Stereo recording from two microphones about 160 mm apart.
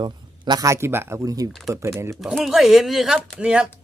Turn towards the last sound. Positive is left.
turn(degrees=-5)  # may be behind; listen again after turning